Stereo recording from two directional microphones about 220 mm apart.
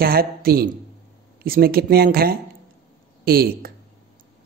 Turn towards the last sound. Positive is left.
turn(degrees=-45)  # may be behind; listen again after turning